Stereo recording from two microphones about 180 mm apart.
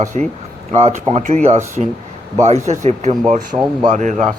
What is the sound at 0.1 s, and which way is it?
Speech, 40° right (ahead or behind).